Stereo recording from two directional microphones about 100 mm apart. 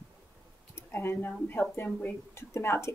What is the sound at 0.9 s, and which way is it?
Speech, 20° left (ahead or behind).